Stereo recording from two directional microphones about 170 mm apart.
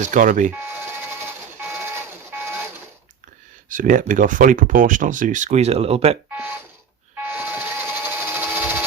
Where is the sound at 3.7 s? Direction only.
50° right (ahead or behind); by 6.2 s 35° right (ahead or behind).